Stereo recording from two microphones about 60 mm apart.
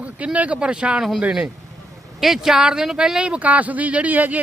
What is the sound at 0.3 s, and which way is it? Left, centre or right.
Speech, right.